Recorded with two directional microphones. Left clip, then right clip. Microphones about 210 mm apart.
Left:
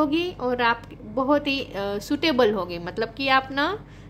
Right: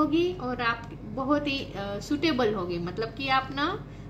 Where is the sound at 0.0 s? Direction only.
55° left (ahead or behind).